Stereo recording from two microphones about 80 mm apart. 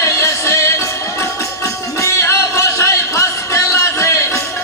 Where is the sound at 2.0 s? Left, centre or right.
Left.